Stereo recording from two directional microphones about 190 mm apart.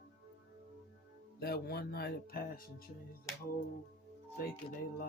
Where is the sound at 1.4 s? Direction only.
55° left (ahead or behind).